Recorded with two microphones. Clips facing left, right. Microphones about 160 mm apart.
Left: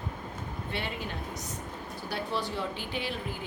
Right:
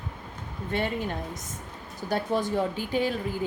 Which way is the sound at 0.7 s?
45° right (ahead or behind).